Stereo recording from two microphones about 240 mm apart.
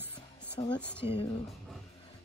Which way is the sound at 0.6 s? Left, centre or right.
Left.